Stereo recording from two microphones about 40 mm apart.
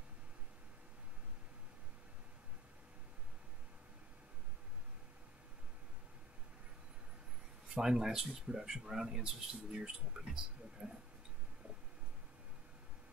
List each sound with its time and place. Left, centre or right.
7.7 s speech: centre